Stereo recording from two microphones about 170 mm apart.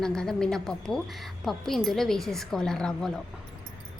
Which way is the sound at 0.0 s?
5° left (ahead or behind).